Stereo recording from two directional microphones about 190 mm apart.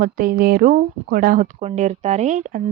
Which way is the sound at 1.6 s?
35° right (ahead or behind).